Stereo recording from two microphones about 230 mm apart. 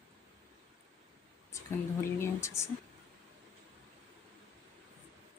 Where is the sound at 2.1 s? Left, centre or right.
Centre.